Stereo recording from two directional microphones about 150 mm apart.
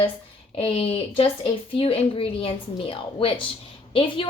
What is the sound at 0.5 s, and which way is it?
A woman's voice, 40° left (ahead or behind).